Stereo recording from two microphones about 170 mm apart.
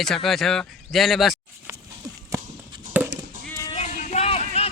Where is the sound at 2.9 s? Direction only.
10° right (ahead or behind).